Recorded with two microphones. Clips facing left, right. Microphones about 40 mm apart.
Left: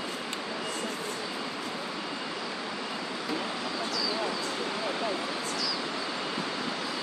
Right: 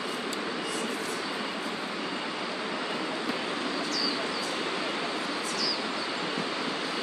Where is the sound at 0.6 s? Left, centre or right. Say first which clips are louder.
Right 2 dB; right.